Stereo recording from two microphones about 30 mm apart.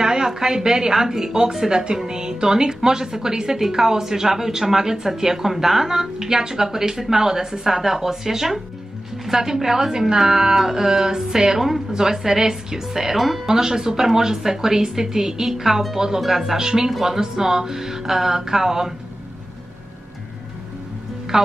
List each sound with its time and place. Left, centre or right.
0.0 s a woman's voice: right; by 16.5 s centre
16.5 s speech: centre
16.9 s a woman's voice: centre